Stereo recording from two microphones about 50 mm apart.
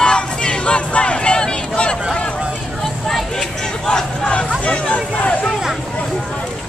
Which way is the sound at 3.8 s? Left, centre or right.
Centre.